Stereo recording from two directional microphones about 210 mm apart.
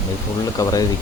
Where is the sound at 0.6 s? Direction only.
15° left (ahead or behind).